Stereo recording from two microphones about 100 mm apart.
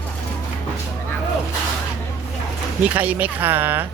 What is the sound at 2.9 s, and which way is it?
Speech, 15° right (ahead or behind).